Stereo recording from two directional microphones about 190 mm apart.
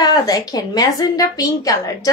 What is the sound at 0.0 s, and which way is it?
A woman's voice, 20° left (ahead or behind).